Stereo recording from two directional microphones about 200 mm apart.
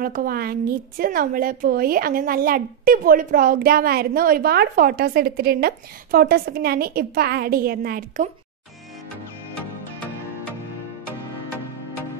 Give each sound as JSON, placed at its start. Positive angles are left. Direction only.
{"t": 0.0, "sound": "a woman's voice", "side_deg": -45}